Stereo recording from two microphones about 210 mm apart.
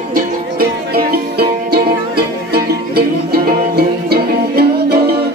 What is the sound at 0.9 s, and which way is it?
Music, 50° right (ahead or behind).